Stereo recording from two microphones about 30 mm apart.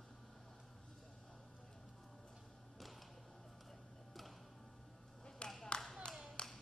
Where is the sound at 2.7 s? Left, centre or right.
Centre.